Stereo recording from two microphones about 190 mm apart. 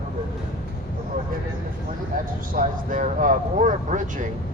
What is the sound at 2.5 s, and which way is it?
Speech, 45° right (ahead or behind).